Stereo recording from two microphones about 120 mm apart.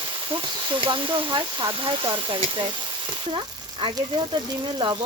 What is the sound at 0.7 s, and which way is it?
Speech, 45° right (ahead or behind).